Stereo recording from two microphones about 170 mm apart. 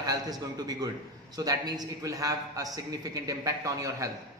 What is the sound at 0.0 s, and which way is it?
A man's voice, 20° right (ahead or behind).